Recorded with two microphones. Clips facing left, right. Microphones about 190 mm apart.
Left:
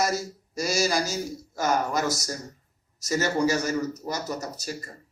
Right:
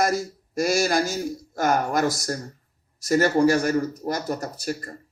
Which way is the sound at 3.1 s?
50° right (ahead or behind).